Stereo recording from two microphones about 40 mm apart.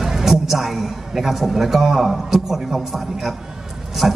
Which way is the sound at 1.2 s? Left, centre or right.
Centre.